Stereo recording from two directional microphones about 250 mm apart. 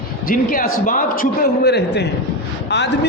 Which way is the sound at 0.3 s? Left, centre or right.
Left.